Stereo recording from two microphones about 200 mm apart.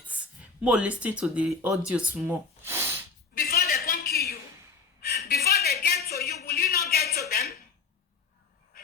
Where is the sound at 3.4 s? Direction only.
50° left (ahead or behind).